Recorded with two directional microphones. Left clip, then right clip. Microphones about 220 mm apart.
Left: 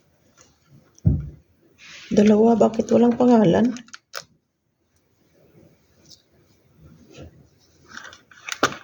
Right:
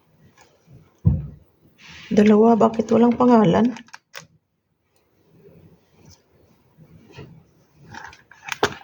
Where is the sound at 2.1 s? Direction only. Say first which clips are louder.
Right 1 dB; centre (ahead or behind).